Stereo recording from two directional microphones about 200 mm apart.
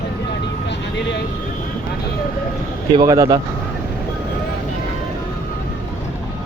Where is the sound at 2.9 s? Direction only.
15° right (ahead or behind).